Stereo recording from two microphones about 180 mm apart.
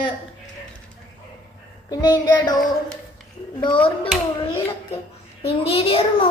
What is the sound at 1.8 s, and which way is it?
Speech, 20° left (ahead or behind).